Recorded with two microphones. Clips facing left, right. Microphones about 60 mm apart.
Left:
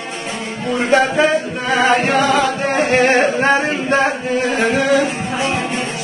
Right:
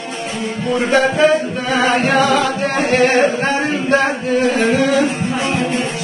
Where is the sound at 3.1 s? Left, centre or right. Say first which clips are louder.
Left 1 dB; left.